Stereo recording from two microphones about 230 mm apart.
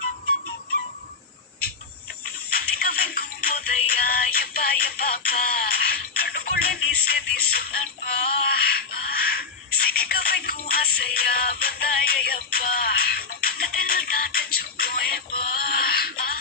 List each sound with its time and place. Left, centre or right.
2.5 s music: left